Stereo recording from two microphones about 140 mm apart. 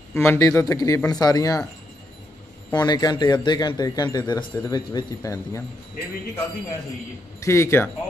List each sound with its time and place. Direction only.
0.1 s speech: 15° left (ahead or behind)
2.7 s speech: 30° left (ahead or behind)
7.3 s speech: 20° left (ahead or behind)